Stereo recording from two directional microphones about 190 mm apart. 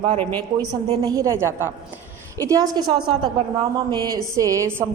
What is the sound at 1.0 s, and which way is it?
A woman's voice, 15° right (ahead or behind).